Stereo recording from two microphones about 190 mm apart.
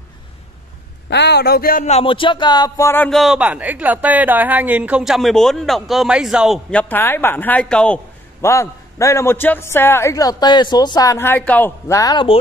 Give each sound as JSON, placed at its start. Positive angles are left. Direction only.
{"t": 1.1, "sound": "speech", "side_deg": 60}
{"t": 3.1, "sound": "speech", "side_deg": 0}